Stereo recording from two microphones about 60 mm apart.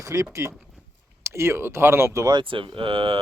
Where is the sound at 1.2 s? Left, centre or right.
Right.